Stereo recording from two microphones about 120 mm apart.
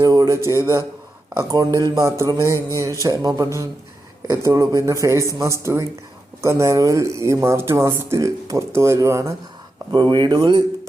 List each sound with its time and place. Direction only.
0.0 s a sound: 30° right (ahead or behind)
0.6 s speech: 20° right (ahead or behind)
9.9 s speech: 40° right (ahead or behind)